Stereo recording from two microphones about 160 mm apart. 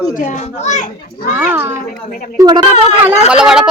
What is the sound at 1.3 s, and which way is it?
Speech, 10° right (ahead or behind).